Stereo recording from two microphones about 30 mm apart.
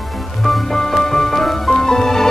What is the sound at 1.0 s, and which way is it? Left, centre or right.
Music, centre.